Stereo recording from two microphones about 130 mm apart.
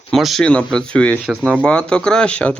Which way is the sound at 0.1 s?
Centre (ahead or behind).